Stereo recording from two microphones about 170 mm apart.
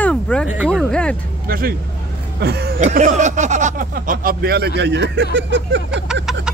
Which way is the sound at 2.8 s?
45° right (ahead or behind).